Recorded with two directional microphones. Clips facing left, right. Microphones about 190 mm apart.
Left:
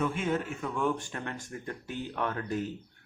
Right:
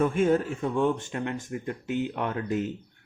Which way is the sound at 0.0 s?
45° right (ahead or behind).